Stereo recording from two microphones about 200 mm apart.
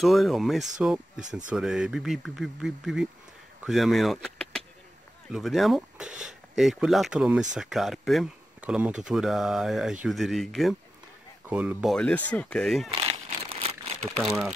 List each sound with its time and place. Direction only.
0.0 s speech: centre (ahead or behind)
13.0 s crumpling: 30° right (ahead or behind)
14.1 s speech: centre (ahead or behind)